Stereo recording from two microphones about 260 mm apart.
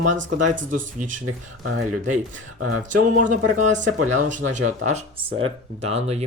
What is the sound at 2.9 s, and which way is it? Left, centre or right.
Speech, right.